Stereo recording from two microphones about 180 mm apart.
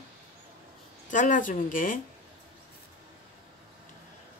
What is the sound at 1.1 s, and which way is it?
Speech, 45° left (ahead or behind).